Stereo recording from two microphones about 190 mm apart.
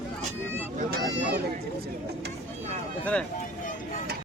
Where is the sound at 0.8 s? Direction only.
55° right (ahead or behind).